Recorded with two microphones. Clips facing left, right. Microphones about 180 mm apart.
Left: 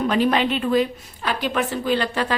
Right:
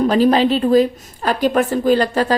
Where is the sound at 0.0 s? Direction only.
35° right (ahead or behind).